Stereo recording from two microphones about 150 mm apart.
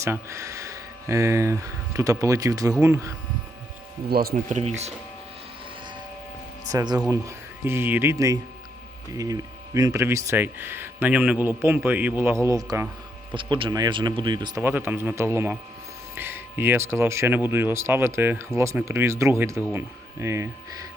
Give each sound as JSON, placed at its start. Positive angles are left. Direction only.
{"t": 0.0, "sound": "speech", "side_deg": -20}
{"t": 4.1, "sound": "speech", "side_deg": -90}
{"t": 4.4, "sound": "speech", "side_deg": -50}
{"t": 6.7, "sound": "speech", "side_deg": -25}
{"t": 13.3, "sound": "speech", "side_deg": -35}
{"t": 14.6, "sound": "speech", "side_deg": -15}